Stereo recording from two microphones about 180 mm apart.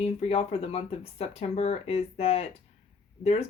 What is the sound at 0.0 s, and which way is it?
Speech, 35° left (ahead or behind).